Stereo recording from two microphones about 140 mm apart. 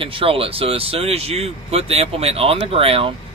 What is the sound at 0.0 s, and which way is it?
Speech, 40° right (ahead or behind).